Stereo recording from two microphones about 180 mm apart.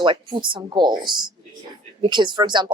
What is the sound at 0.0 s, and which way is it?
Speech, 25° right (ahead or behind).